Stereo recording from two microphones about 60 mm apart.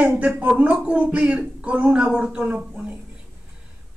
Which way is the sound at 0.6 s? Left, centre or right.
Right.